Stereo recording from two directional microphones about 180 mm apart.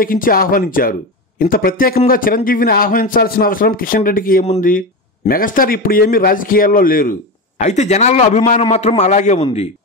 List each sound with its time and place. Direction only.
0.0 s a man's voice: 50° left (ahead or behind); by 9.7 s 35° left (ahead or behind)